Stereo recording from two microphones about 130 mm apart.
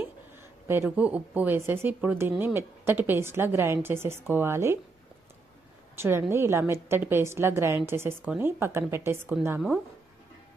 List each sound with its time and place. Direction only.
0.7 s a woman's voice: 15° right (ahead or behind)
6.0 s a woman's voice: 20° right (ahead or behind)